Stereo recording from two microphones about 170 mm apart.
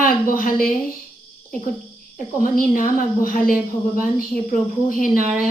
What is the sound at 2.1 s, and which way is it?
A woman's voice, 50° left (ahead or behind).